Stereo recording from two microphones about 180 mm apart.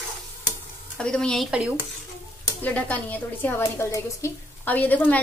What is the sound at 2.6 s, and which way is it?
A woman's voice, 10° left (ahead or behind).